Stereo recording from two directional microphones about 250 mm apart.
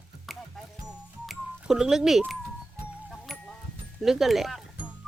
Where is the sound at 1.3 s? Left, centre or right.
Centre.